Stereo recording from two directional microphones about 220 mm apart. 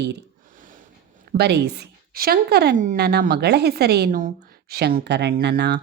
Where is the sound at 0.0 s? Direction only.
50° right (ahead or behind).